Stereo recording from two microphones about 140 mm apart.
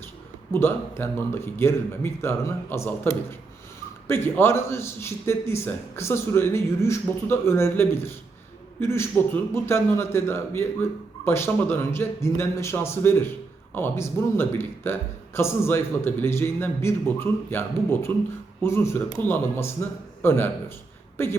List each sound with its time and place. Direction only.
0.5 s a man's voice: 15° left (ahead or behind)